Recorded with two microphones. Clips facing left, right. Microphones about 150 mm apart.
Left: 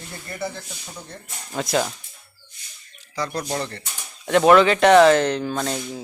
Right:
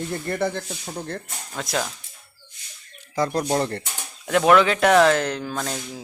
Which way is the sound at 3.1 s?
50° right (ahead or behind).